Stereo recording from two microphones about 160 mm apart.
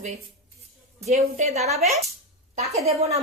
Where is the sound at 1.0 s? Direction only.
40° right (ahead or behind).